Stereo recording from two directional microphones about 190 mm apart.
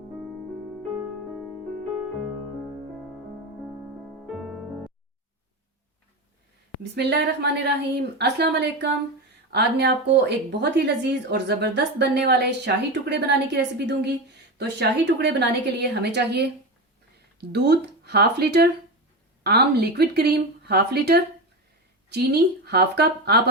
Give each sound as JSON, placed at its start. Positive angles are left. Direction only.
{"t": 0.7, "sound": "music", "side_deg": 0}
{"t": 4.3, "sound": "music", "side_deg": 0}
{"t": 6.9, "sound": "a woman's voice", "side_deg": -60}
{"t": 17.5, "sound": "a woman's voice", "side_deg": -60}